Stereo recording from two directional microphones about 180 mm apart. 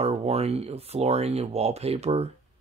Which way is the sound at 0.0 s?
35° right (ahead or behind).